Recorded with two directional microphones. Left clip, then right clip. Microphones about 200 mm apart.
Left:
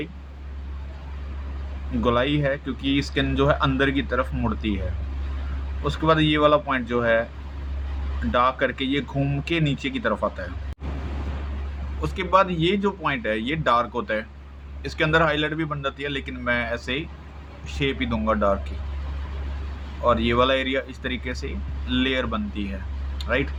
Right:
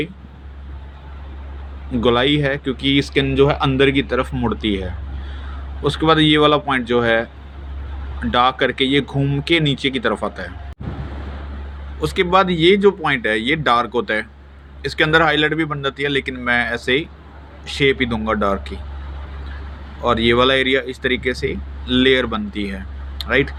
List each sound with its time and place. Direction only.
2.0 s speech: 20° right (ahead or behind)
5.8 s speech: 20° right (ahead or behind)
8.3 s speech: 20° right (ahead or behind)
11.9 s speech: 15° right (ahead or behind)
20.0 s speech: 15° right (ahead or behind)
23.1 s a sound: 20° right (ahead or behind)